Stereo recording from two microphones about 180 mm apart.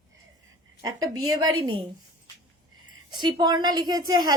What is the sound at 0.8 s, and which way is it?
Speech, 20° right (ahead or behind).